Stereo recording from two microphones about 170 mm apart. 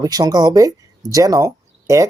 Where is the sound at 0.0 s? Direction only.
20° right (ahead or behind).